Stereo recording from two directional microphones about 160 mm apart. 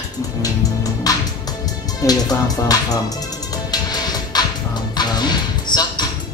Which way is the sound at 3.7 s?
25° left (ahead or behind).